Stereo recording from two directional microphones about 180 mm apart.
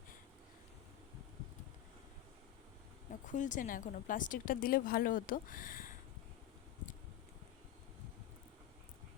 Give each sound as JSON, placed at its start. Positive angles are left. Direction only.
{"t": 3.3, "sound": "speech", "side_deg": 45}